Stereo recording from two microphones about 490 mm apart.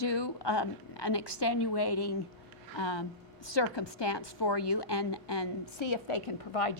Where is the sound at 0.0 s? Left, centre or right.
Left.